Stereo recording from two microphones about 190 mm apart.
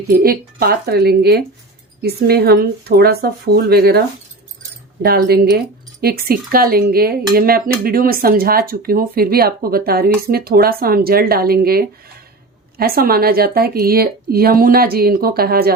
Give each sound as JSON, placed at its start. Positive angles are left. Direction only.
{"t": 0.1, "sound": "speech", "side_deg": -50}
{"t": 5.0, "sound": "speech", "side_deg": -55}